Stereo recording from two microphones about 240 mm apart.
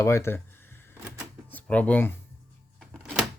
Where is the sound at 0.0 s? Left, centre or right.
Centre.